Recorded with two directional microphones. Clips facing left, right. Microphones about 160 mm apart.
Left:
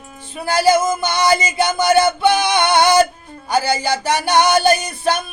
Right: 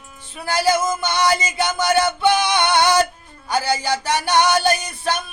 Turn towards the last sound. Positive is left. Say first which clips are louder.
# left 4 dB
turn(degrees=10)  # may be behind; listen again after turning